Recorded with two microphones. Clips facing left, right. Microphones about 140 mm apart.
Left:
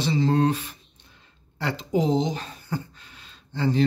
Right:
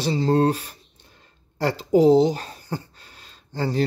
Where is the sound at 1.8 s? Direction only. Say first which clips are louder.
Right 8 dB; 40° right (ahead or behind).